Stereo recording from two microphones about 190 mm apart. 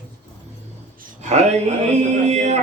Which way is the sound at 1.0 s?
35° right (ahead or behind).